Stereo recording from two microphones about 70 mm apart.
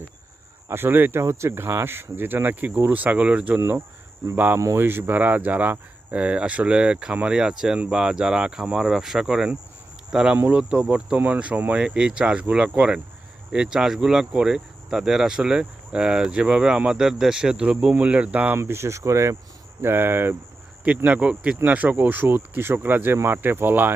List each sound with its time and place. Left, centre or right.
0.7 s speech: right
1.2 s speech: right; by 3.6 s centre
3.6 s speech: right
18.5 s speech: right
19.8 s speech: right
20.8 s speech: right